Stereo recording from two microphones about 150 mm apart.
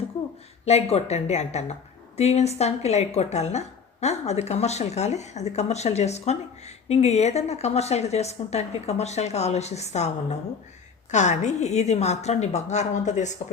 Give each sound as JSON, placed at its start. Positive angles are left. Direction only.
{"t": 0.6, "sound": "a woman's voice", "side_deg": 45}
{"t": 11.1, "sound": "a woman's voice", "side_deg": 50}